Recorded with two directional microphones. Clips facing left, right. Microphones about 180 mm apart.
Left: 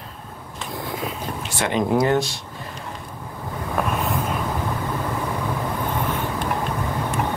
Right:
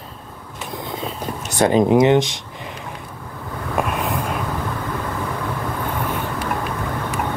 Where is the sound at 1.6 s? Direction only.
35° right (ahead or behind).